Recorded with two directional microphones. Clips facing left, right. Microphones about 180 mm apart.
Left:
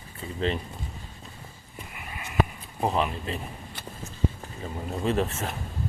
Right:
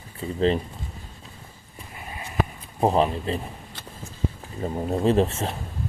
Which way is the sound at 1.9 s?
30° right (ahead or behind).